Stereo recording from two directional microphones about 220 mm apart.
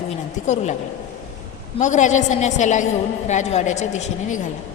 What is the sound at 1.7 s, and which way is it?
A woman's voice, 35° left (ahead or behind).